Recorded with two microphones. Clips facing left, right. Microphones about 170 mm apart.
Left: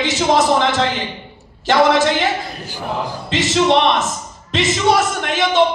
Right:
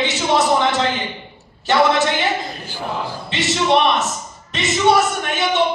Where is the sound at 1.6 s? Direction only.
90° left.